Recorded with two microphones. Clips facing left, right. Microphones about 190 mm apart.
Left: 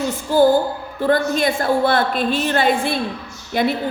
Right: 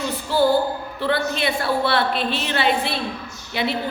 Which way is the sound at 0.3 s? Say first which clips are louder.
Left 4 dB; 45° left (ahead or behind).